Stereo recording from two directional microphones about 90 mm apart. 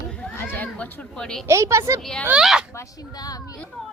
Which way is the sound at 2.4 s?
5° right (ahead or behind).